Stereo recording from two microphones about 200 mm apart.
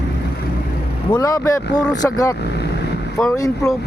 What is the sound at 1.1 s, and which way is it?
Speech, 15° left (ahead or behind).